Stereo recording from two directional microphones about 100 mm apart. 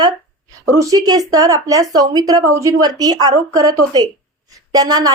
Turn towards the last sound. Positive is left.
turn(degrees=-40)  # may be behind; listen again after turning